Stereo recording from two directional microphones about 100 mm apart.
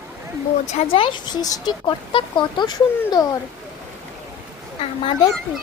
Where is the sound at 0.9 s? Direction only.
55° left (ahead or behind).